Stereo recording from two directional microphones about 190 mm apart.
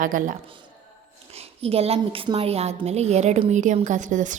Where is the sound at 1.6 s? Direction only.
30° right (ahead or behind).